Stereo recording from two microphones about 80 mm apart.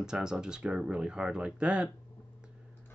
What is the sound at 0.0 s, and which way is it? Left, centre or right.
Speech, centre.